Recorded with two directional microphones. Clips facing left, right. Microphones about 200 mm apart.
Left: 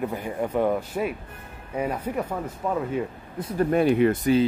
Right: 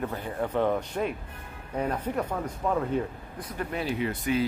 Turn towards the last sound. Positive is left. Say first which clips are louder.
# left 10 dB
turn(degrees=55)  # may be behind; listen again after turning